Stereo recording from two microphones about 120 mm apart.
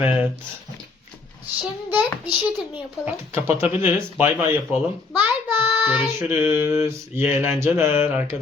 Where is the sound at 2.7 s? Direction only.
20° right (ahead or behind).